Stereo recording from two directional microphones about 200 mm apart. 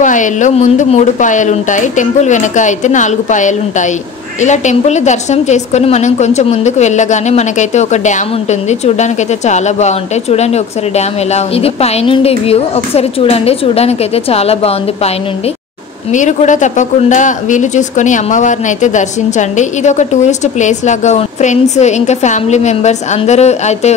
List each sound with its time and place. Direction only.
0.0 s a woman's voice: 40° left (ahead or behind)
16.1 s a woman's voice: 35° left (ahead or behind)